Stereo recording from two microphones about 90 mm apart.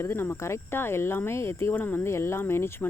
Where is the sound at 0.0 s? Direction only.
25° left (ahead or behind).